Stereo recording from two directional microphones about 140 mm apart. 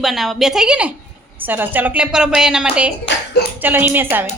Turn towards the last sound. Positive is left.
turn(degrees=-15)  # may be behind; listen again after turning